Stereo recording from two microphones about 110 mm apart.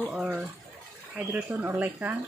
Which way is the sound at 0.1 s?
10° right (ahead or behind).